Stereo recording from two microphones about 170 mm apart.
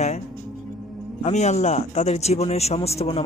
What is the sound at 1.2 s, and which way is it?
A man's voice, 40° left (ahead or behind).